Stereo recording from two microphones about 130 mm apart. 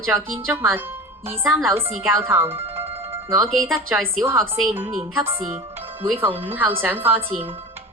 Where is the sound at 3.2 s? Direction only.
20° right (ahead or behind).